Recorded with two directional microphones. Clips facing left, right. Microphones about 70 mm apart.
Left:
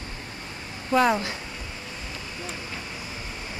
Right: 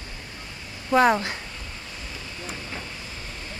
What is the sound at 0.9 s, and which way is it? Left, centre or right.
Speech, right.